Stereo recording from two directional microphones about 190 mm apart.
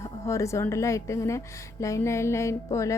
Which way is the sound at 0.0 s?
15° left (ahead or behind).